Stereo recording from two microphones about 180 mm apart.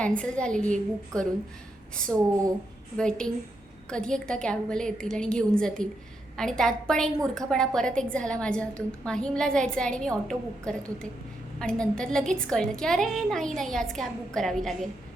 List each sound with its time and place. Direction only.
0.0 s a woman's voice: 5° left (ahead or behind)
3.0 s a woman's voice: 5° left (ahead or behind)